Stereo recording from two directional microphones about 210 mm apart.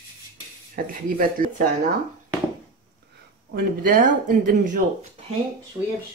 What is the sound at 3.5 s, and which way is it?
Speech, 40° right (ahead or behind).